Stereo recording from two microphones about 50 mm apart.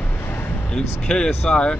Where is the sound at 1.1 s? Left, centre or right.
Centre.